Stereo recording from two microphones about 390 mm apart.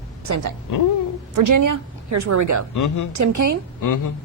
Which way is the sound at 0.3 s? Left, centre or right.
Right.